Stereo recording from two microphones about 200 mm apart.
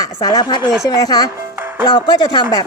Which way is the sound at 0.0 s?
20° left (ahead or behind).